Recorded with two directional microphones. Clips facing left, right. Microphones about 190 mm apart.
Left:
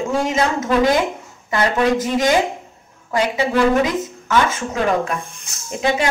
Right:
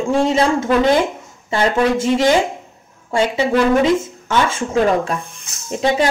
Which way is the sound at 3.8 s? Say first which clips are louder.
Right 5 dB; 25° right (ahead or behind).